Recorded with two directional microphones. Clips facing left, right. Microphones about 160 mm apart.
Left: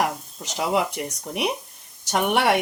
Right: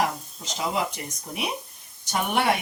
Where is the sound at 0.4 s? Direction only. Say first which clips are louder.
Left 4 dB; 70° left (ahead or behind).